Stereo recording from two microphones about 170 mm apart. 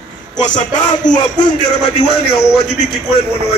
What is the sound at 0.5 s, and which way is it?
Speech, 45° left (ahead or behind).